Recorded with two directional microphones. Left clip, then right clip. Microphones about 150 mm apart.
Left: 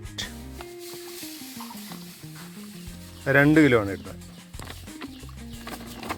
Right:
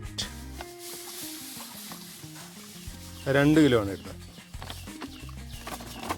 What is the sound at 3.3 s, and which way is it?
Speech, centre (ahead or behind).